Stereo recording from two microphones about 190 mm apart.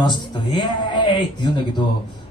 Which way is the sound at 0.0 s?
25° left (ahead or behind).